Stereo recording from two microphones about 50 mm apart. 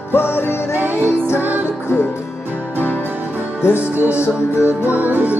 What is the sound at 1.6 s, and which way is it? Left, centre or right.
Music, left.